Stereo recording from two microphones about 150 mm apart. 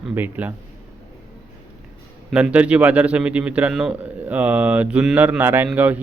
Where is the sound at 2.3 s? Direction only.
10° right (ahead or behind).